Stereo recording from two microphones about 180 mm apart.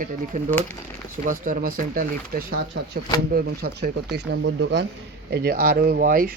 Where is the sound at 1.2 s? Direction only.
45° right (ahead or behind); by 4.8 s 75° right (ahead or behind).